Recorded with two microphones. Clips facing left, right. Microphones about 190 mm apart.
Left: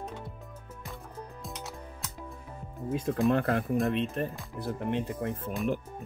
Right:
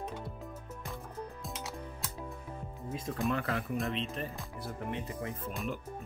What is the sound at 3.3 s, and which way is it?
Speech, 55° left (ahead or behind).